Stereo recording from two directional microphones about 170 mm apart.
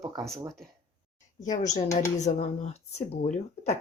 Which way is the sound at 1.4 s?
45° left (ahead or behind).